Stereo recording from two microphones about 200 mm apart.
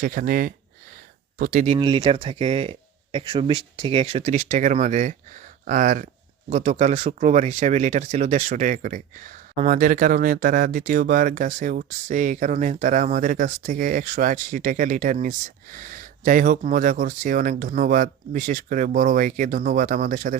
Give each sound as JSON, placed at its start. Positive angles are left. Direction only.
{"t": 0.0, "sound": "speech", "side_deg": -45}